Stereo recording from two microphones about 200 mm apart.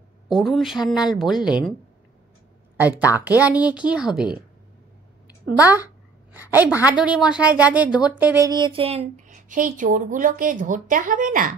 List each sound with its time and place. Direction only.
0.3 s a woman's voice: centre (ahead or behind)
3.0 s a woman's voice: 10° right (ahead or behind)
6.3 s a woman's voice: 10° right (ahead or behind); by 11.5 s 45° right (ahead or behind)